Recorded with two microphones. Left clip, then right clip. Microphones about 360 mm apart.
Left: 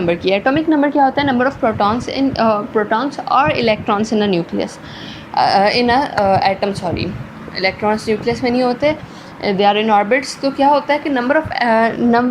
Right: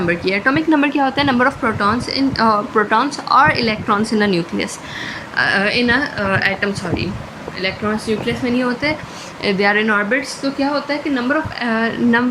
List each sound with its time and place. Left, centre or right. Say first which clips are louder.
0.0 s a woman's voice: left 2 dB; centre
5.4 s a woman's voice: left 3 dB; centre